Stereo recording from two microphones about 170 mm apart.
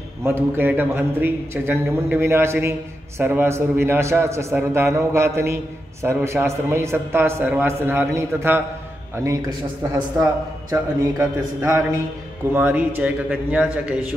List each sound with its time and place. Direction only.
0.2 s a man's voice: 15° right (ahead or behind)
10.7 s a man's voice: 15° right (ahead or behind)